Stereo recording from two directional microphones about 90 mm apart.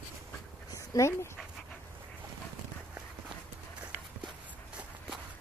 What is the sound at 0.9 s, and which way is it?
Speech, 40° left (ahead or behind).